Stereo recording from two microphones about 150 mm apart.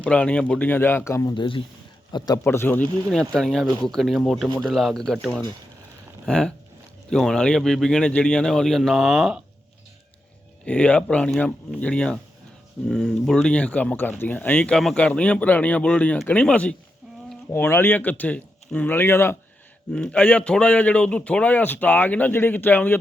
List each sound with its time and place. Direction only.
0.0 s speech: 10° left (ahead or behind)
1.3 s a man's voice: 35° left (ahead or behind)
2.4 s speech: 15° left (ahead or behind); by 9.4 s centre (ahead or behind)
10.7 s speech: 10° left (ahead or behind)
19.9 s speech: 5° left (ahead or behind)